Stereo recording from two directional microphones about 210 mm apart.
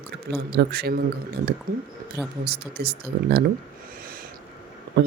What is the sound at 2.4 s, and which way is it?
Speech, 50° right (ahead or behind).